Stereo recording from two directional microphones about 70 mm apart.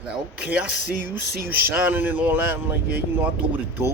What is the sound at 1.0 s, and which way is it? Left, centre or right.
Speech, right.